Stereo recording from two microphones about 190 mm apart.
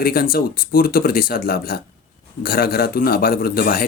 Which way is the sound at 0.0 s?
50° left (ahead or behind).